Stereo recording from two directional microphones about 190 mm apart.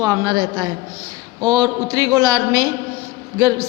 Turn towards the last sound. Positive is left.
turn(degrees=-20)  # may be behind; listen again after turning